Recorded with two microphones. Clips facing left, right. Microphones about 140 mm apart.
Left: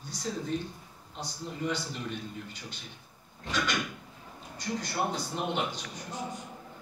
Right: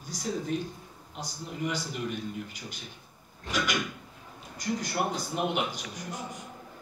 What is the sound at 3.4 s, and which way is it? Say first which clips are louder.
Speech: right 1 dB; 10° right (ahead or behind).